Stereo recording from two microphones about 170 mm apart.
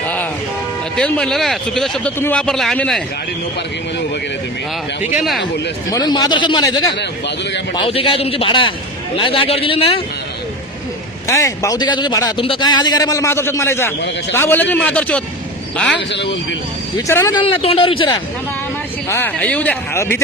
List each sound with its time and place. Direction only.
0.9 s speech: 5° left (ahead or behind)
5.1 s speech: centre (ahead or behind)
5.4 s a man's voice: 90° left
5.9 s speech: 20° left (ahead or behind)
6.9 s a man's voice: 90° left
7.8 s a man's voice: 30° left (ahead or behind)
11.3 s speech: 20° left (ahead or behind)
16.0 s a man's voice: 90° left
17.1 s speech: 15° left (ahead or behind)
17.4 s a man's voice: 35° left (ahead or behind)
19.0 s speech: 15° left (ahead or behind)